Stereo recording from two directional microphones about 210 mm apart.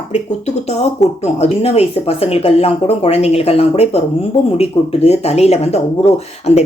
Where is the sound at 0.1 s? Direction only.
30° left (ahead or behind).